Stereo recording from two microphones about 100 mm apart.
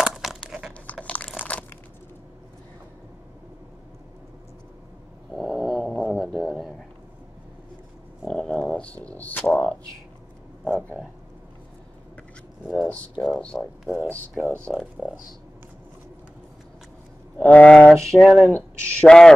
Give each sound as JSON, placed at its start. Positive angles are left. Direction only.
{"t": 0.0, "sound": "crumpling", "side_deg": -5}
{"t": 0.9, "sound": "crunch", "side_deg": 10}
{"t": 5.3, "sound": "cat", "side_deg": 0}
{"t": 6.0, "sound": "a sound", "side_deg": 0}
{"t": 8.3, "sound": "bird", "side_deg": 10}
{"t": 9.4, "sound": "a sound", "side_deg": 10}
{"t": 12.7, "sound": "a sound", "side_deg": 10}
{"t": 13.1, "sound": "speech", "side_deg": -5}
{"t": 13.4, "sound": "speech", "side_deg": 10}
{"t": 15.0, "sound": "speech", "side_deg": -10}
{"t": 17.5, "sound": "speech", "side_deg": 10}